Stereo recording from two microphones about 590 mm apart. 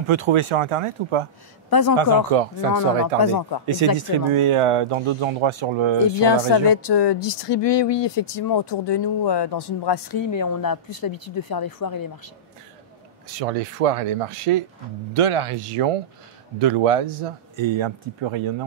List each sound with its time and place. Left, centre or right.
0.1 s speech: right
1.7 s speech: left
2.0 s speech: right
3.2 s speech: left
3.6 s speech: right
6.2 s speech: left
13.3 s speech: right